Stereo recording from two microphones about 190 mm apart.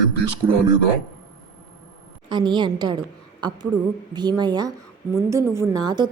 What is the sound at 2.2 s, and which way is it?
A woman's voice, 25° right (ahead or behind).